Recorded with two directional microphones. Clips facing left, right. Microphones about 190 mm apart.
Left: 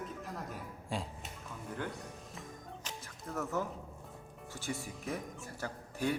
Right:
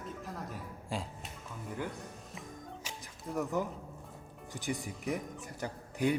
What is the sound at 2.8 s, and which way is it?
Music, 15° right (ahead or behind).